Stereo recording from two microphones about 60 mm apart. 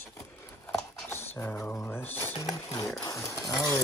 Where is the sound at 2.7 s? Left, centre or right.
Left.